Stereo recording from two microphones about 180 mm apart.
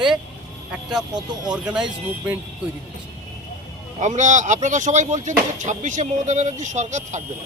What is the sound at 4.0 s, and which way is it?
Speech, 40° right (ahead or behind).